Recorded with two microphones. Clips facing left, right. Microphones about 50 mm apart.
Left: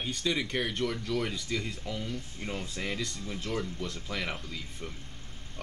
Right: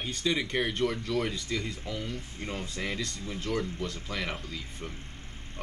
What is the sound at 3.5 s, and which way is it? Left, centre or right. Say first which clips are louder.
Speech: right 3 dB; centre.